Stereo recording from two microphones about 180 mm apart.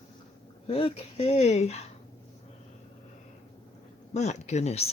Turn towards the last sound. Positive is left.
turn(degrees=35)  # may be behind; listen again after turning